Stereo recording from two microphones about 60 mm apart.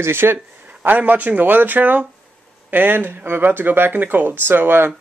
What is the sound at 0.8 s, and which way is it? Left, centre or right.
Speech, right.